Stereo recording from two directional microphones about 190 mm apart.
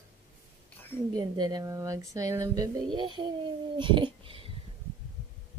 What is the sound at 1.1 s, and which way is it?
Speech, 20° right (ahead or behind).